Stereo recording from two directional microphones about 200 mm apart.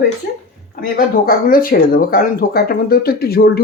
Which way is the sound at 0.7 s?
45° left (ahead or behind).